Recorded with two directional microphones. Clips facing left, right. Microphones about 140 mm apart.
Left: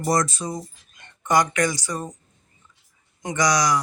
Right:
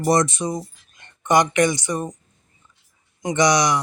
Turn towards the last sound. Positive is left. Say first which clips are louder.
# right 3 dB
turn(degrees=-25)  # may be behind; listen again after turning